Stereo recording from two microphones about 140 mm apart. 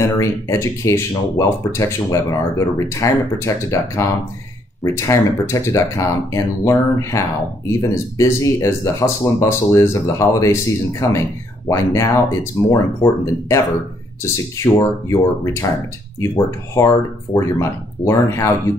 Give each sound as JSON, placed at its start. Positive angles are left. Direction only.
{"t": 0.0, "sound": "speech", "side_deg": 20}
{"t": 14.6, "sound": "speech", "side_deg": 20}